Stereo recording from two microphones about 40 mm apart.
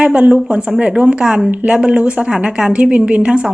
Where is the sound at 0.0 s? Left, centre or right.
Right.